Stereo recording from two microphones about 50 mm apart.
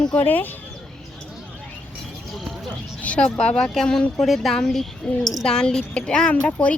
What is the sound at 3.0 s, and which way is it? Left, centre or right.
A child's voice, left.